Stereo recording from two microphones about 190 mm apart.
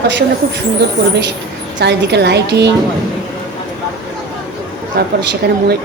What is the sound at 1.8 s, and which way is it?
Speech, 60° right (ahead or behind).